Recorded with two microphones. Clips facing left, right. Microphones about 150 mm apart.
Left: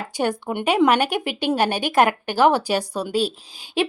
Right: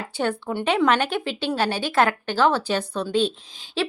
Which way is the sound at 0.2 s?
15° left (ahead or behind).